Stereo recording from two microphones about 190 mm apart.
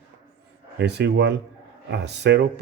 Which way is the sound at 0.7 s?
65° right (ahead or behind).